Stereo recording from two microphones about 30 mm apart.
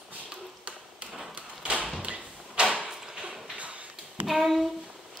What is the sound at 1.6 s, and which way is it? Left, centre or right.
Door, right.